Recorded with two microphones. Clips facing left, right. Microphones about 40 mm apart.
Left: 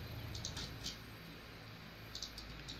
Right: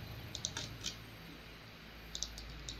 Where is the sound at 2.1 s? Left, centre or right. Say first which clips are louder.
Right 3 dB; right.